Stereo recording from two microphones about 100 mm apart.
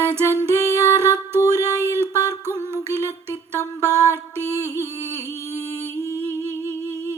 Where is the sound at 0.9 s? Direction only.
25° right (ahead or behind).